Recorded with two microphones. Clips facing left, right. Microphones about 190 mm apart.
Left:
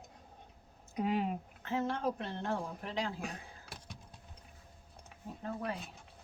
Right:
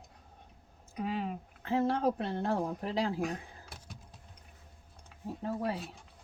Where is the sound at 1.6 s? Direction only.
35° right (ahead or behind).